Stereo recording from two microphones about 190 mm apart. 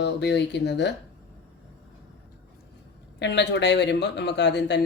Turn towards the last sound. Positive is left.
turn(degrees=65)  # may be behind; listen again after turning